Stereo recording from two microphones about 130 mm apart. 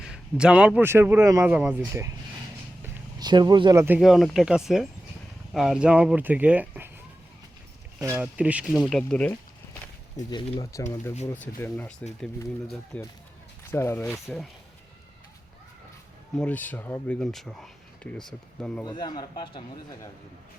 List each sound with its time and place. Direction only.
0.0 s a man's voice: 5° right (ahead or behind); by 2.1 s 20° right (ahead or behind)
3.2 s speech: 30° right (ahead or behind)
3.8 s speech: 15° right (ahead or behind)
4.0 s speech: centre (ahead or behind)
8.0 s speech: 15° right (ahead or behind); by 9.4 s 10° left (ahead or behind)
10.2 s speech: 30° left (ahead or behind)
11.6 s speech: 15° left (ahead or behind)
14.1 s speech: centre (ahead or behind)
16.3 s speech: 10° left (ahead or behind)
18.9 s a man's voice: 35° left (ahead or behind)